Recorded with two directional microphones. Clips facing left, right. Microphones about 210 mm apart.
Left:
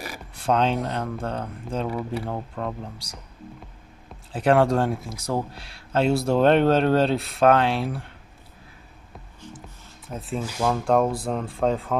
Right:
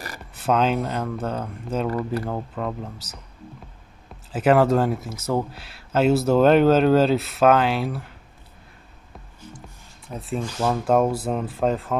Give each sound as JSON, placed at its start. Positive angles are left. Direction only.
{"t": 0.3, "sound": "a sound", "side_deg": -5}
{"t": 0.8, "sound": "speech", "side_deg": -5}
{"t": 4.3, "sound": "speech", "side_deg": -5}
{"t": 10.0, "sound": "speech", "side_deg": 0}